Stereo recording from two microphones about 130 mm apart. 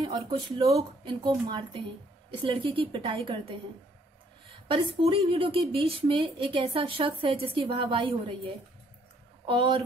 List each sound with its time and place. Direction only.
0.0 s speech: 35° right (ahead or behind)
0.7 s speech: 25° right (ahead or behind)
1.5 s a woman's voice: 40° right (ahead or behind)
4.6 s a woman's voice: 45° right (ahead or behind)
9.5 s speech: 40° right (ahead or behind)